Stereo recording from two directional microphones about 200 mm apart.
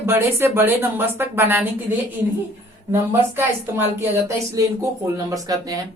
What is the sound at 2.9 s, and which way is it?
Speech, 10° right (ahead or behind).